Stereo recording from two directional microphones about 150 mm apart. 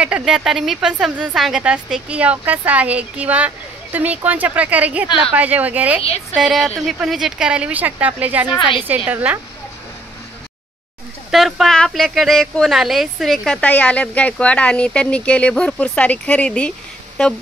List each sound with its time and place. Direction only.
0.0 s a woman's voice: 5° right (ahead or behind)
8.5 s a woman's voice: 30° left (ahead or behind)
8.8 s a woman's voice: 10° right (ahead or behind)
11.2 s speech: centre (ahead or behind)